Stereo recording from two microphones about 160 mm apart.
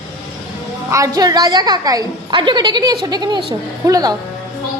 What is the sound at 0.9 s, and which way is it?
A woman's voice, 20° right (ahead or behind).